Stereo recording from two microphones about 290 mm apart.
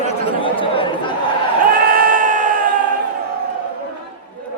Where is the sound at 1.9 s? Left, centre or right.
Right.